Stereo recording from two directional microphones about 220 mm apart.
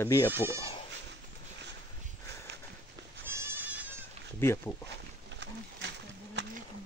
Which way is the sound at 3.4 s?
10° right (ahead or behind).